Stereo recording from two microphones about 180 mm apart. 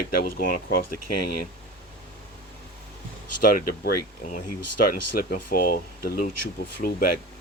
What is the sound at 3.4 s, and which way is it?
Speech, 50° left (ahead or behind).